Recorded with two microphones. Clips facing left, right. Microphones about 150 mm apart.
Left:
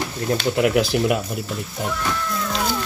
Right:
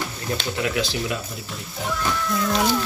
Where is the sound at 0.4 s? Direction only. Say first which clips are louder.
Left 7 dB; 55° left (ahead or behind).